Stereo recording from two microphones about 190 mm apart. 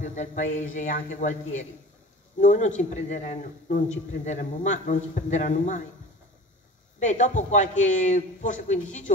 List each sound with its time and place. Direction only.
0.0 s a man's voice: 40° left (ahead or behind)
7.0 s a man's voice: 40° left (ahead or behind)